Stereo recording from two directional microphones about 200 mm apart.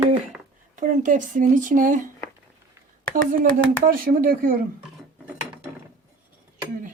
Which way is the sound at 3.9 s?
45° right (ahead or behind).